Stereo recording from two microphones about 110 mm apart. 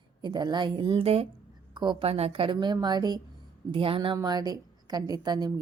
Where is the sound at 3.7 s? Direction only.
50° right (ahead or behind).